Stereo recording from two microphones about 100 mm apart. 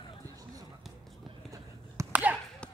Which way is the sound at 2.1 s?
15° right (ahead or behind).